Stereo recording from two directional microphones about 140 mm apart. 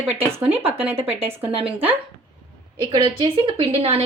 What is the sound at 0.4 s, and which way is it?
Speech, 45° right (ahead or behind).